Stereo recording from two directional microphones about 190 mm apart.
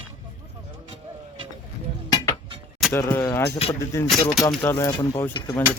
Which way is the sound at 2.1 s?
20° left (ahead or behind).